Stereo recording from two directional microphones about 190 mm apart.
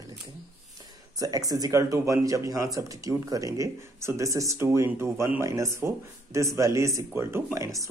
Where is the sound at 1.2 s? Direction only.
20° right (ahead or behind).